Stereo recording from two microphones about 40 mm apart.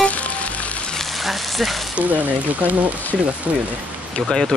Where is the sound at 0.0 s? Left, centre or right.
Left.